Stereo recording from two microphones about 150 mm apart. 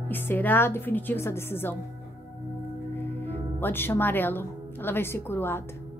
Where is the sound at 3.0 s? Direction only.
15° left (ahead or behind).